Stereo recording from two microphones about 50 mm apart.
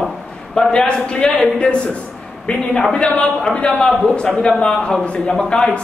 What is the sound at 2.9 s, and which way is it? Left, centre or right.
A man's voice, centre.